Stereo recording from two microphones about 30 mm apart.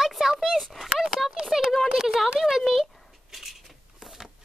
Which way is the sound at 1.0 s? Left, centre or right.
Centre.